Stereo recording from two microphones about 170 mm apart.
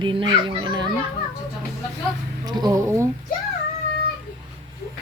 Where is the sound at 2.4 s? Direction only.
25° right (ahead or behind).